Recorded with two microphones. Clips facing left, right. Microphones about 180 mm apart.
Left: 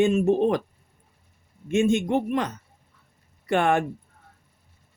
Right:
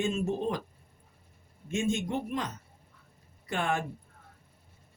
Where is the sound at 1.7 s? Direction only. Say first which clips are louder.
Left 9 dB; 65° left (ahead or behind).